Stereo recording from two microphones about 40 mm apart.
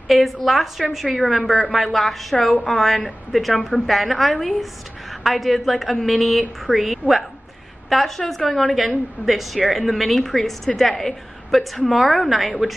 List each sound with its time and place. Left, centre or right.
0.1 s a woman's voice: centre